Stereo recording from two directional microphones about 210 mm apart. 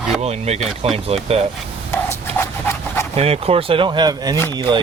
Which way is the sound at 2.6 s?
10° left (ahead or behind).